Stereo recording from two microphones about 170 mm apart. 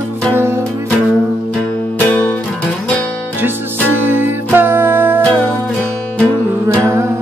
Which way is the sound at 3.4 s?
10° right (ahead or behind).